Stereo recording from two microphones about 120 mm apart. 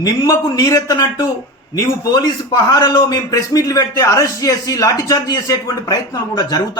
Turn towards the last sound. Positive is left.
turn(degrees=30)  # may be behind; listen again after turning